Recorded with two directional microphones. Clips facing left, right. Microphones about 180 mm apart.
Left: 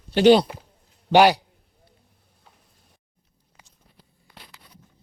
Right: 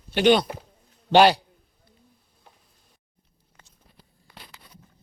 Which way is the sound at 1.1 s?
15° left (ahead or behind).